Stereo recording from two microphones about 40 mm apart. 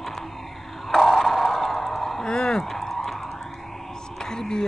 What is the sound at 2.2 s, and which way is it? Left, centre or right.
Speech, centre.